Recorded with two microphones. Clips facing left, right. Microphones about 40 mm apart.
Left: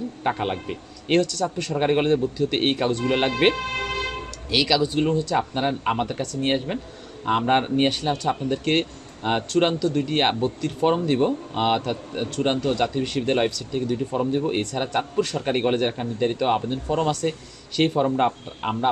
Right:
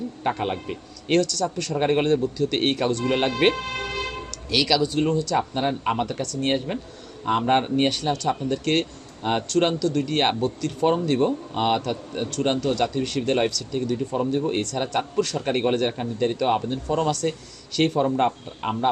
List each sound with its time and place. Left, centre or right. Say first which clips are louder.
0.2 s speech: left 1 dB; centre
1.7 s speech: even; centre
6.4 s speech: left 1 dB; centre
15.2 s speech: even; left
15.4 s speech: even; centre